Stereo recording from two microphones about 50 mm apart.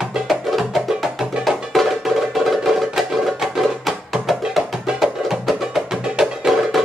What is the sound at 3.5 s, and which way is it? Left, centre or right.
Music, centre.